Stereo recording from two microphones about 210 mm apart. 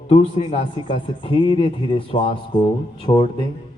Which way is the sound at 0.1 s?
25° left (ahead or behind).